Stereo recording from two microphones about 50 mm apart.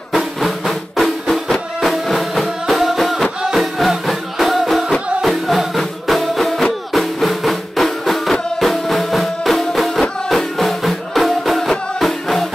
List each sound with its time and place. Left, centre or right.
0.1 s music: centre